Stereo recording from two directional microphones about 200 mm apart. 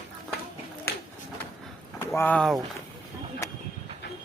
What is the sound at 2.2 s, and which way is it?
Speech, 5° left (ahead or behind).